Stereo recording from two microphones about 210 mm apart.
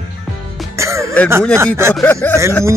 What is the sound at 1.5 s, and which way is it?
Speech, 15° right (ahead or behind).